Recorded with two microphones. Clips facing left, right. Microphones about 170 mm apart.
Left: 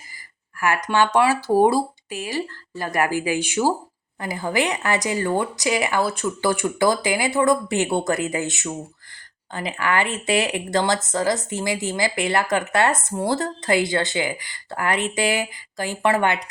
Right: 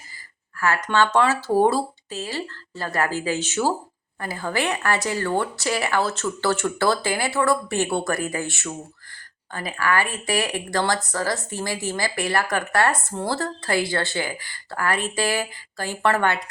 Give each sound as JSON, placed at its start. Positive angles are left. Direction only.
{"t": 0.6, "sound": "speech", "side_deg": 15}